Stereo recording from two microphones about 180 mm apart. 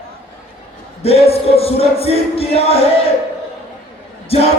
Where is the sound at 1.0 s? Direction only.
35° left (ahead or behind).